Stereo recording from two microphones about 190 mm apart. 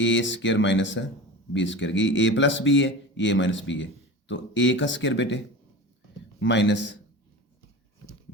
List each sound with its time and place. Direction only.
0.0 s a man's voice: 75° left (ahead or behind)
6.4 s a man's voice: 70° left (ahead or behind)